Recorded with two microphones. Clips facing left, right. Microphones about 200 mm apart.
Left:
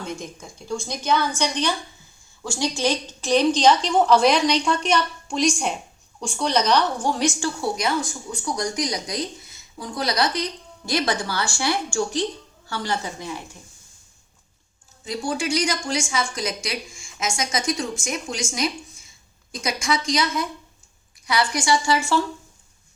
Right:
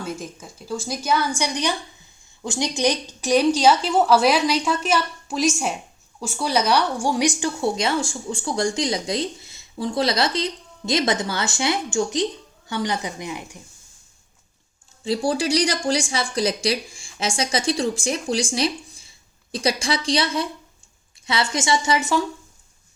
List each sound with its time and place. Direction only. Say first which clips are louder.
0.0 s a woman's voice: right 1 dB; 5° right (ahead or behind)
15.0 s a woman's voice: right 4 dB; 30° right (ahead or behind)